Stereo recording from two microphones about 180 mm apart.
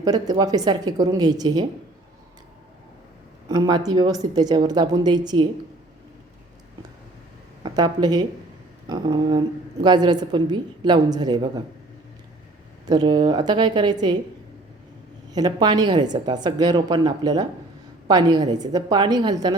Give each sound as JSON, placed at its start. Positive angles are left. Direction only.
{"t": 0.0, "sound": "a woman's voice", "side_deg": -20}
{"t": 3.5, "sound": "a woman's voice", "side_deg": -20}
{"t": 7.6, "sound": "a woman's voice", "side_deg": -25}
{"t": 12.8, "sound": "a woman's voice", "side_deg": -20}
{"t": 15.3, "sound": "a woman's voice", "side_deg": -20}